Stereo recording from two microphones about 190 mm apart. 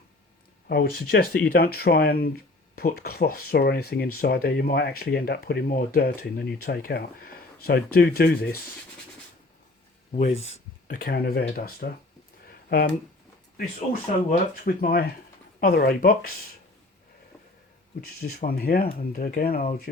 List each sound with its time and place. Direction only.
0.7 s speech: 55° left (ahead or behind)
10.1 s speech: 40° left (ahead or behind)
14.3 s speech: 45° left (ahead or behind)
18.2 s speech: 50° left (ahead or behind)